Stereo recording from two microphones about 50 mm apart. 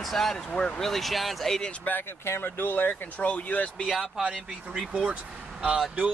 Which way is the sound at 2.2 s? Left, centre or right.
Left.